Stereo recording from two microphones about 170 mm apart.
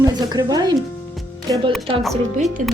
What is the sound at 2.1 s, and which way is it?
Speech, 45° right (ahead or behind).